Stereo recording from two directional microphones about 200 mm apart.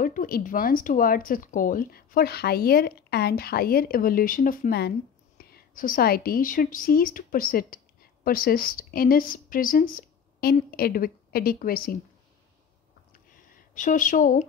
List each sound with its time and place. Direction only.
0.0 s a woman's voice: 45° left (ahead or behind)
13.7 s speech: 40° left (ahead or behind)